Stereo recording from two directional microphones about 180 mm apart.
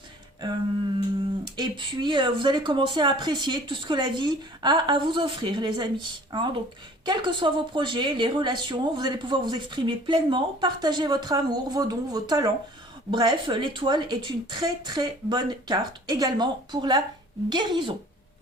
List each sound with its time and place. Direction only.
1.5 s speech: 25° right (ahead or behind)